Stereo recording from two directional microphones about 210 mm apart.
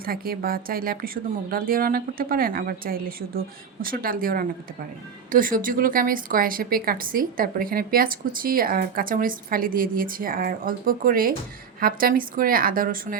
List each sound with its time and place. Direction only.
0.0 s a woman's voice: 45° right (ahead or behind)